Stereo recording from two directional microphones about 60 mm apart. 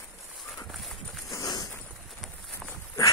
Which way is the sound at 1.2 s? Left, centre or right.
Left.